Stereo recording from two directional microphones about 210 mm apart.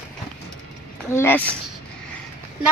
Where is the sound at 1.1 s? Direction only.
10° left (ahead or behind).